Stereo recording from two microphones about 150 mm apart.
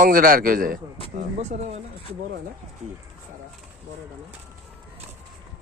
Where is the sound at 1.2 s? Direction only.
50° right (ahead or behind).